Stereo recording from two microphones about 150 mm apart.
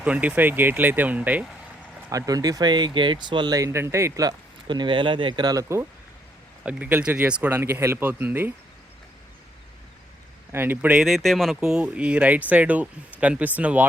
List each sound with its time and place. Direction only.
0.0 s speech: 10° right (ahead or behind)
2.0 s speech: 25° right (ahead or behind)
6.7 s speech: 10° right (ahead or behind)
10.5 s speech: 15° right (ahead or behind)